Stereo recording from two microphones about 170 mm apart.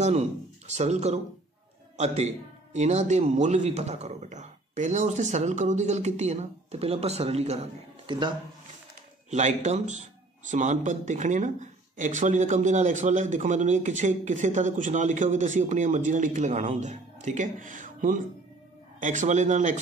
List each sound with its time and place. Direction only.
0.0 s a man's voice: 40° right (ahead or behind)
9.3 s speech: 45° right (ahead or behind)